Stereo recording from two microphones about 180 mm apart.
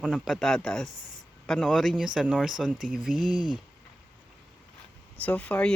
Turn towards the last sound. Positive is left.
turn(degrees=5)  # may be behind; listen again after turning